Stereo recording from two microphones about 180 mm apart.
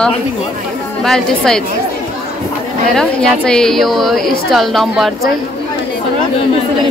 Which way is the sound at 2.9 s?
5° left (ahead or behind).